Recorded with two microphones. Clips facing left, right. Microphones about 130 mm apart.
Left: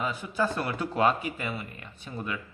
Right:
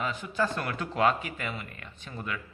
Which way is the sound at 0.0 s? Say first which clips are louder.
Left 1 dB; 10° left (ahead or behind).